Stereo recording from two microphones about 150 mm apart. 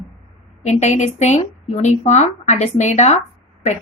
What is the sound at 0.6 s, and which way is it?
A woman's voice, 50° left (ahead or behind).